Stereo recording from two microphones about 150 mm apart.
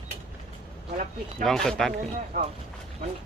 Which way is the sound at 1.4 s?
5° left (ahead or behind).